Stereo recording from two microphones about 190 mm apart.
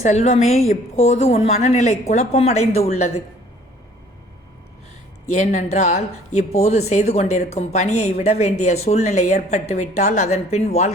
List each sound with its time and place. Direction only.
0.0 s speech: 35° left (ahead or behind)
5.3 s speech: 40° left (ahead or behind)